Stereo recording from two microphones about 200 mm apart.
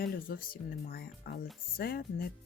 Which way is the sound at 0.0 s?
45° left (ahead or behind).